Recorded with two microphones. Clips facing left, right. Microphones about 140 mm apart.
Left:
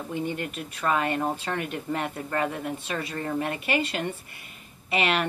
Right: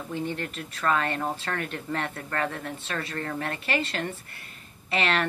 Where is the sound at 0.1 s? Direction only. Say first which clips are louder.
Left 1 dB; 15° left (ahead or behind).